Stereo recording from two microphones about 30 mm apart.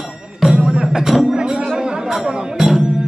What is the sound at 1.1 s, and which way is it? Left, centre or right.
Music, centre.